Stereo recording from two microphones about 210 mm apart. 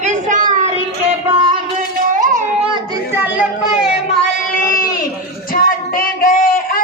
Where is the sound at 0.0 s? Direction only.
35° right (ahead or behind).